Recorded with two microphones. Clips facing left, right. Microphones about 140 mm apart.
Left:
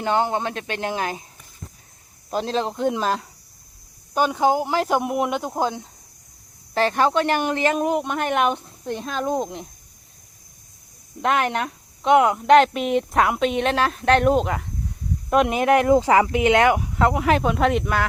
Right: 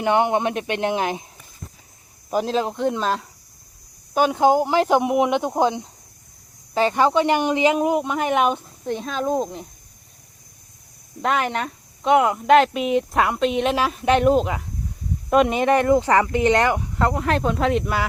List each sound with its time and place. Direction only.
0.0 s speech: 20° right (ahead or behind)
2.3 s speech: 10° right (ahead or behind)
4.1 s speech: 15° right (ahead or behind)
4.7 s speech: 5° left (ahead or behind)
6.7 s speech: 10° right (ahead or behind)
7.8 s speech: 5° right (ahead or behind)
11.2 s speech: centre (ahead or behind)